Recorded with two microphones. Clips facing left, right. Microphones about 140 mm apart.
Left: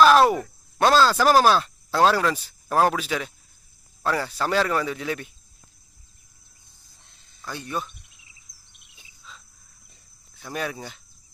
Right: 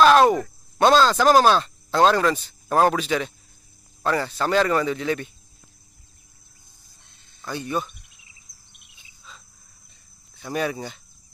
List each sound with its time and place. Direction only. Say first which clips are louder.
0.0 s speech: right 1 dB; 5° left (ahead or behind)
7.1 s a sound: right 4 dB; centre (ahead or behind)
9.3 s cricket: even; centre (ahead or behind)
10.4 s speech: right 5 dB; centre (ahead or behind)